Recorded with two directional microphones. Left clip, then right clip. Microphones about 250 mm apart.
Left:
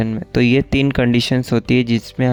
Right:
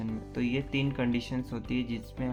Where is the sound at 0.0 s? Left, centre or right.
Left.